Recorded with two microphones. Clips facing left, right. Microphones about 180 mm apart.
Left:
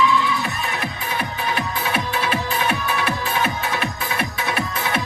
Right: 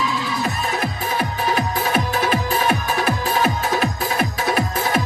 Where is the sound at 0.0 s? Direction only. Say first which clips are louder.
Left 5 dB; 40° right (ahead or behind).